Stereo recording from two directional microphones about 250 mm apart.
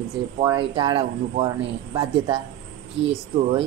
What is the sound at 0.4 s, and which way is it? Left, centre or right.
Speech, centre.